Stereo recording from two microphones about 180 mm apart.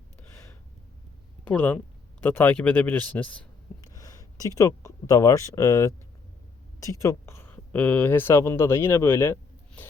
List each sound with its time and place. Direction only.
0.2 s gasp: 15° left (ahead or behind)
1.5 s speech: 10° left (ahead or behind)
3.9 s speech: 20° left (ahead or behind)
7.0 s speech: 15° left (ahead or behind)